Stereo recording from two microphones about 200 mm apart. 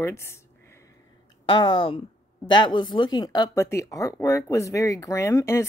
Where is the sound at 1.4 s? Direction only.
25° left (ahead or behind).